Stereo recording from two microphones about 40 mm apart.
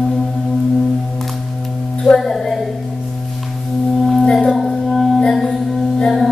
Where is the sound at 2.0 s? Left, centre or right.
Centre.